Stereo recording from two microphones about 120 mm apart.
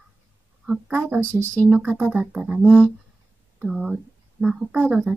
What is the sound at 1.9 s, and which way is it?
Speech, 15° right (ahead or behind).